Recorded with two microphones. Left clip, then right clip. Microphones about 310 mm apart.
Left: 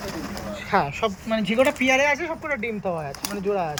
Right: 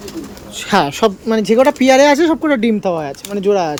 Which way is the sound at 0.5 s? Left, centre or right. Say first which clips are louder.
Right 8 dB; centre.